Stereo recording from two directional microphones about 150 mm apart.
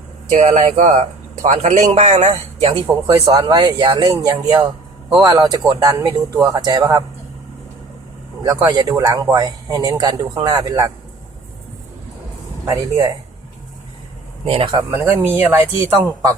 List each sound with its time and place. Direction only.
0.3 s a man's voice: 55° right (ahead or behind)
2.8 s speech: 25° right (ahead or behind)
8.6 s speech: 20° right (ahead or behind)
12.6 s speech: 20° right (ahead or behind)
14.4 s speech: 40° right (ahead or behind)
14.8 s speech: 15° right (ahead or behind)